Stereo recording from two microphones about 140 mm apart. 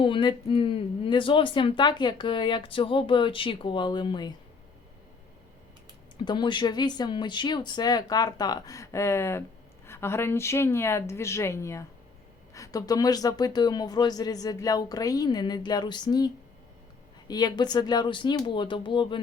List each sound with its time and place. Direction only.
0.0 s speech: 35° left (ahead or behind)
6.1 s speech: 35° left (ahead or behind)